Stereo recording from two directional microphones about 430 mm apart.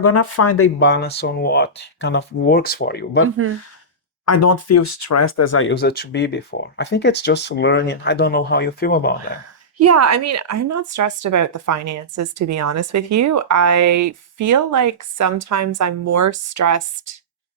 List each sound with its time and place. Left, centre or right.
0.0 s speech: left
3.2 s speech: right
4.3 s speech: left
9.7 s speech: right